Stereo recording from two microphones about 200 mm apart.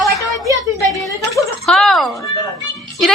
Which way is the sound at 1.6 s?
Centre (ahead or behind).